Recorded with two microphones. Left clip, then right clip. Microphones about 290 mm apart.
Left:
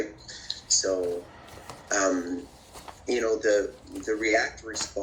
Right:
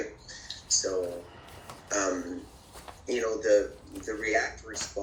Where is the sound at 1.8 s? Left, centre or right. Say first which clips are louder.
Left 4 dB; left.